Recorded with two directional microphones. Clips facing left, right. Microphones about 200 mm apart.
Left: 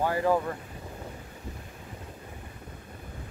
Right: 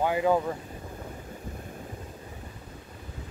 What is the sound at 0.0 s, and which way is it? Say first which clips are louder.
Speech: right 1 dB; 15° right (ahead or behind).